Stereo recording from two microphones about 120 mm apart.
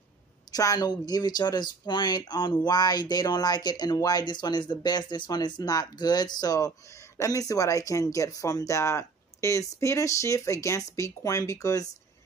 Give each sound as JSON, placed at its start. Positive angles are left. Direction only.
{"t": 0.5, "sound": "speech", "side_deg": 30}